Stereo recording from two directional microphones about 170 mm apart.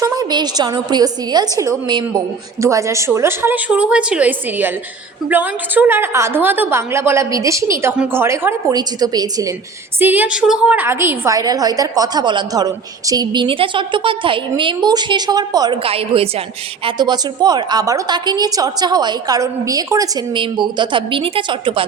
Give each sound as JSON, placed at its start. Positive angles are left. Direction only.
{"t": 0.0, "sound": "a woman's voice", "side_deg": -20}
{"t": 10.0, "sound": "a woman's voice", "side_deg": -10}